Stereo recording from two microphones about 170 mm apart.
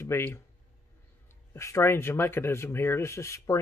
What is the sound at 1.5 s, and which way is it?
Speech, 15° left (ahead or behind).